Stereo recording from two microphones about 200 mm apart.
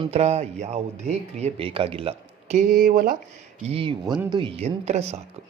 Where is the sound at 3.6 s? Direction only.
30° right (ahead or behind).